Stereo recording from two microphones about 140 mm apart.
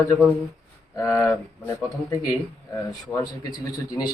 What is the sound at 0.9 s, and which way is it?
A man's voice, 20° left (ahead or behind).